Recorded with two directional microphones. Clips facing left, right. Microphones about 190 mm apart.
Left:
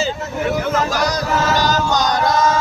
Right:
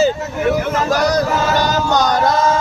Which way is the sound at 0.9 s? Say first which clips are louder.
Right 4 dB; 55° right (ahead or behind).